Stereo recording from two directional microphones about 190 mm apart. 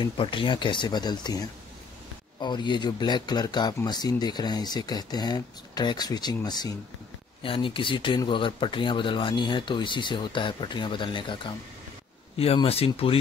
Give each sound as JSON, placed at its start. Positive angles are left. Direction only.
{"t": 0.0, "sound": "speech", "side_deg": 25}
{"t": 12.4, "sound": "speech", "side_deg": 30}